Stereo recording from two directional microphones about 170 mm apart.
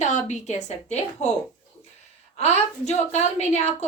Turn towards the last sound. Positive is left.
turn(degrees=40)  # may be behind; listen again after turning